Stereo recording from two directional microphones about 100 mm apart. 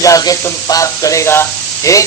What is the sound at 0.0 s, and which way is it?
Speech, 35° left (ahead or behind).